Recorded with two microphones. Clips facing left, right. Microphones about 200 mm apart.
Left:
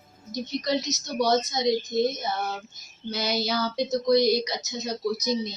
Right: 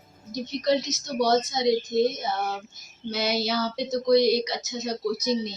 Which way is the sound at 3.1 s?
5° right (ahead or behind).